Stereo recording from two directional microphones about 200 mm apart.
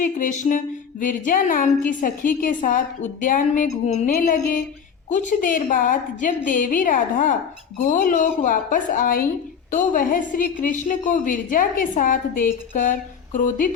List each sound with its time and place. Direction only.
0.0 s music: 40° left (ahead or behind)
9.7 s a woman's voice: 45° left (ahead or behind)
12.7 s a sound: 40° left (ahead or behind)